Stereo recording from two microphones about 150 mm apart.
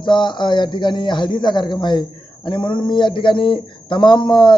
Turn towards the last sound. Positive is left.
turn(degrees=30)  # may be behind; listen again after turning